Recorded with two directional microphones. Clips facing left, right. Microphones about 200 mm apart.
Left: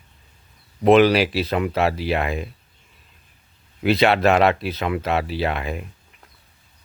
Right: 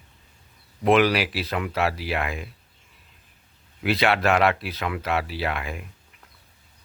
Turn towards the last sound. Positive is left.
turn(degrees=25)  # may be behind; listen again after turning